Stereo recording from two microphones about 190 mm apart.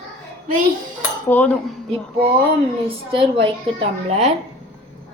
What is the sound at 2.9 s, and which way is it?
A woman's voice, 30° right (ahead or behind).